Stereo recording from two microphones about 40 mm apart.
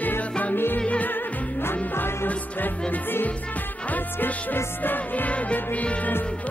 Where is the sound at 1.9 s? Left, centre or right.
Left.